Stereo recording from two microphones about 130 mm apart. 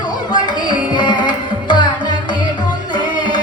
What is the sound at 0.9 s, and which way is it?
Carnatic music, 35° left (ahead or behind).